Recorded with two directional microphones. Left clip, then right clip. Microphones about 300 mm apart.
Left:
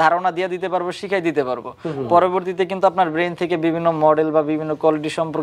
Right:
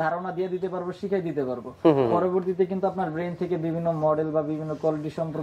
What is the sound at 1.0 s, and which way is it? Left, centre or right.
Speech, centre.